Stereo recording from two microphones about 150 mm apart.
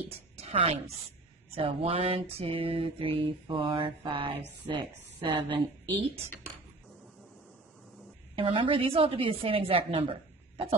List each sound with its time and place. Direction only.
0.4 s a woman's voice: 45° right (ahead or behind)
1.5 s mantra: 40° right (ahead or behind)
8.4 s mantra: 35° right (ahead or behind)